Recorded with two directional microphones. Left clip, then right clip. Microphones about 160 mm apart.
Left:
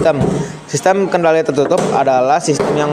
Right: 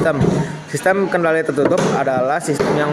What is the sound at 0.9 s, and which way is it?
Speech, 15° left (ahead or behind).